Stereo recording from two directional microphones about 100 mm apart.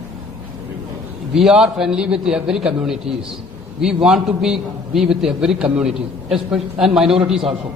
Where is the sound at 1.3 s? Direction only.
5° right (ahead or behind).